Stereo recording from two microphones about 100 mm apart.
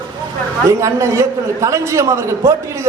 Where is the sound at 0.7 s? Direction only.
30° right (ahead or behind).